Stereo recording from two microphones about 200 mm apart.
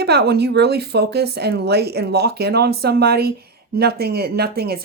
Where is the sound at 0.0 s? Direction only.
55° right (ahead or behind).